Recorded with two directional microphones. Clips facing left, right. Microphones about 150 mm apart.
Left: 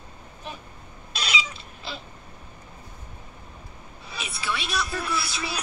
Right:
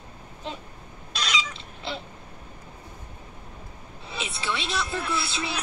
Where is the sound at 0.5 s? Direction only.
25° right (ahead or behind).